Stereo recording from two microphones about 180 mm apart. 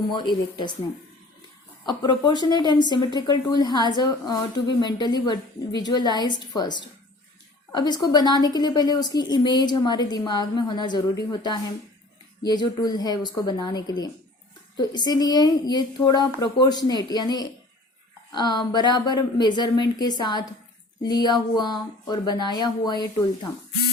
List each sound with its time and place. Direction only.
0.1 s a woman's voice: 25° left (ahead or behind)
1.9 s a woman's voice: 25° left (ahead or behind)